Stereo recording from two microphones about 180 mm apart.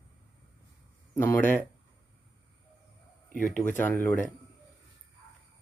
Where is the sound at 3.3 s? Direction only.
50° left (ahead or behind).